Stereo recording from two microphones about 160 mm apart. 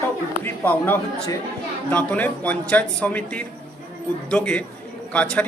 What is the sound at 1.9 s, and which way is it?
Speech, 10° left (ahead or behind).